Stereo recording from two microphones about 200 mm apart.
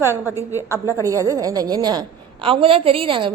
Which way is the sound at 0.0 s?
10° right (ahead or behind).